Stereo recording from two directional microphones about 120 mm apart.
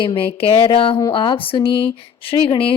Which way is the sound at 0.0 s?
45° left (ahead or behind).